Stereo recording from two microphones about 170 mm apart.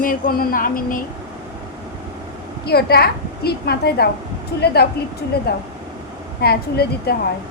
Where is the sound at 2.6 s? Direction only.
65° left (ahead or behind).